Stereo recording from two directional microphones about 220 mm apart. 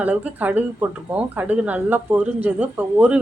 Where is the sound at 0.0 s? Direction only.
5° right (ahead or behind).